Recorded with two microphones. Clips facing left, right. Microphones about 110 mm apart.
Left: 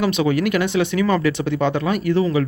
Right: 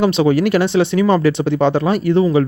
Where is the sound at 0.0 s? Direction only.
25° right (ahead or behind).